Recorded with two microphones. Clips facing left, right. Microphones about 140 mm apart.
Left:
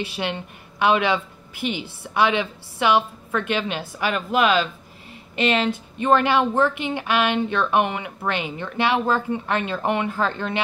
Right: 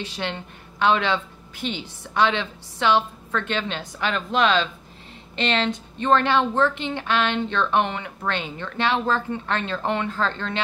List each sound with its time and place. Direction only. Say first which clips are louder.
0.0 s a woman's voice: left 3 dB; 10° left (ahead or behind)